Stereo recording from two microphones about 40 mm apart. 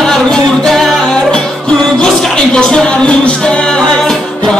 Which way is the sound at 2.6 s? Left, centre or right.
Left.